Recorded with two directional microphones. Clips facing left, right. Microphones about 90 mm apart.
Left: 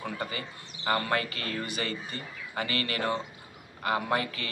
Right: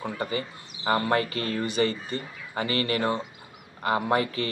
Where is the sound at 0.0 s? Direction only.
30° right (ahead or behind).